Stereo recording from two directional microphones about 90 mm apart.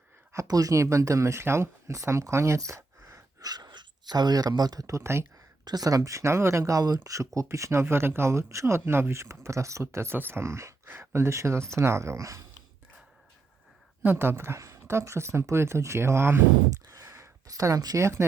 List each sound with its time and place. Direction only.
0.3 s speech: 40° right (ahead or behind)
3.5 s speech: 50° right (ahead or behind); by 5.2 s 30° right (ahead or behind)
5.6 s speech: 45° right (ahead or behind)
14.0 s speech: 25° right (ahead or behind)
16.9 s a sound: 40° right (ahead or behind)
18.0 s speech: 30° right (ahead or behind)